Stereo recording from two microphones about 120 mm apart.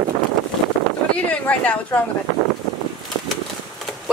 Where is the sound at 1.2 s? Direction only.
10° left (ahead or behind).